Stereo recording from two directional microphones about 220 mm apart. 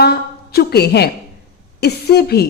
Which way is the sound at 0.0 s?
45° left (ahead or behind).